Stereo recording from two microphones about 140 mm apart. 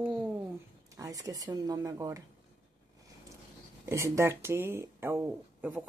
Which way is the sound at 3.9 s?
20° right (ahead or behind).